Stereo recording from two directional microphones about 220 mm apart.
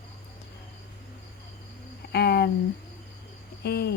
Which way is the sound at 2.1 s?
45° left (ahead or behind).